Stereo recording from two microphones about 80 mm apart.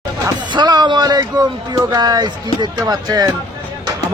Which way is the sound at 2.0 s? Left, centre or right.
Right.